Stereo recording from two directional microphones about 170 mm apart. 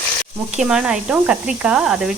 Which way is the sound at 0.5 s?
5° right (ahead or behind).